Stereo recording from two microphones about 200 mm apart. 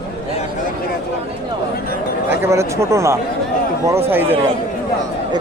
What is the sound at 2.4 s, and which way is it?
A man's voice, 15° right (ahead or behind).